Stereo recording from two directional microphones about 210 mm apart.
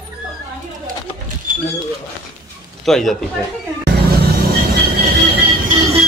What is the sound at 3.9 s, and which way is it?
Vehicle, 50° right (ahead or behind).